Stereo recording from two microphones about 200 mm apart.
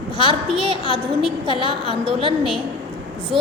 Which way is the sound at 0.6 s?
25° right (ahead or behind).